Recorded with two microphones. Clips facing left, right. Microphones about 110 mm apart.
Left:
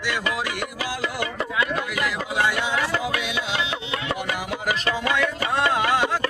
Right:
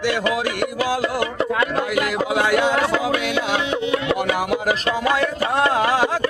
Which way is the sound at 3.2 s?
55° right (ahead or behind).